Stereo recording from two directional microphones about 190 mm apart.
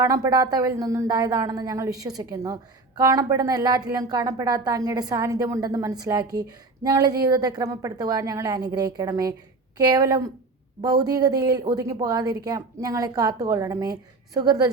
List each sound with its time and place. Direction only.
0.0 s a woman's voice: 15° right (ahead or behind)